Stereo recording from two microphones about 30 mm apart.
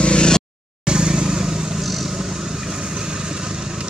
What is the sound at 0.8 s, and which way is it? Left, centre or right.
Vehicle, right.